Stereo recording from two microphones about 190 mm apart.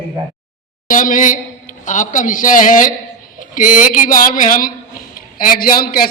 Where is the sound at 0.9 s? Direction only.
45° left (ahead or behind).